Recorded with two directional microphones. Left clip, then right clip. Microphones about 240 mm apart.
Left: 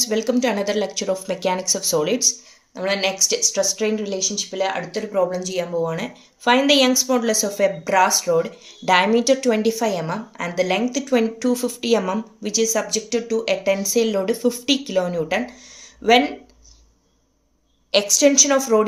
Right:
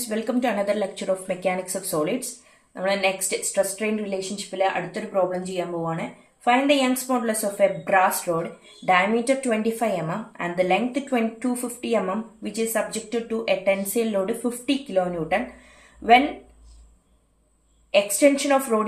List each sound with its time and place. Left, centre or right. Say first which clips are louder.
0.1 s a woman's voice: left 4 dB; left
17.9 s speech: left 3 dB; left